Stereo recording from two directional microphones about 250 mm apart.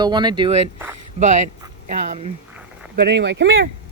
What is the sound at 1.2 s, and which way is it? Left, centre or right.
Speech, right.